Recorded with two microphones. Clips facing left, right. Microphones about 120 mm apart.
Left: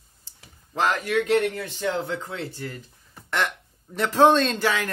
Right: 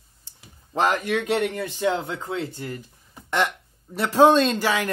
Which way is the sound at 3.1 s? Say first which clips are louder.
Right 3 dB; 15° right (ahead or behind).